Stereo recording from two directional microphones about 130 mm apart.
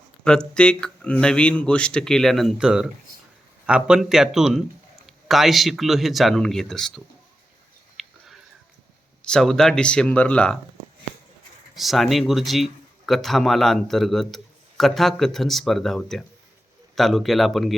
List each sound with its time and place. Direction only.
0.3 s speech: 5° left (ahead or behind)
8.0 s a sound: centre (ahead or behind)
9.2 s speech: 5° left (ahead or behind)
11.7 s speech: centre (ahead or behind)